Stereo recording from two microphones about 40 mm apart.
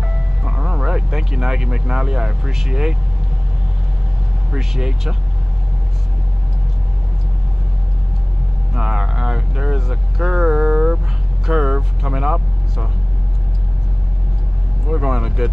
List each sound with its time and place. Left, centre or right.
0.0 s music: centre
4.5 s speech: centre
8.7 s speech: centre
14.9 s speech: centre